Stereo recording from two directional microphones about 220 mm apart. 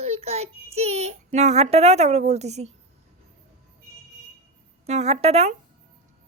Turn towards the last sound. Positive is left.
turn(degrees=-30)  # may be behind; listen again after turning